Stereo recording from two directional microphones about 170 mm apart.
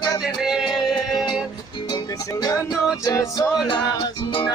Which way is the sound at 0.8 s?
20° left (ahead or behind).